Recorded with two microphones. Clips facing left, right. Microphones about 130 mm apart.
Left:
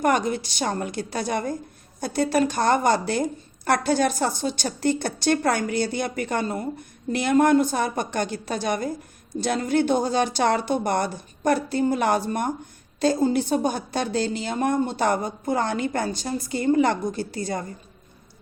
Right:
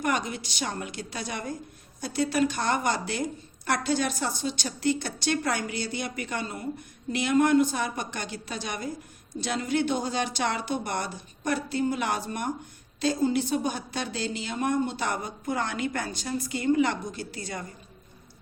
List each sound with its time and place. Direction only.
0.0 s a woman's voice: 45° left (ahead or behind)